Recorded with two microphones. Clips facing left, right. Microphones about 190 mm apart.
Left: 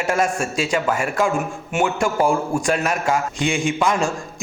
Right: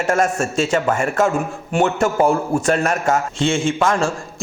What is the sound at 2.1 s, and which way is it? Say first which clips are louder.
Speech: right 2 dB; 20° right (ahead or behind).